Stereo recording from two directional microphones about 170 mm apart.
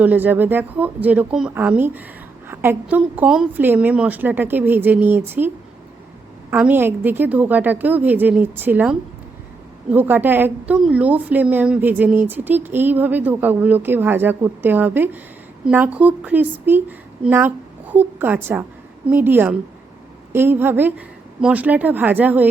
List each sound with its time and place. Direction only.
0.0 s a woman's voice: 10° right (ahead or behind)
6.5 s a woman's voice: 10° right (ahead or behind)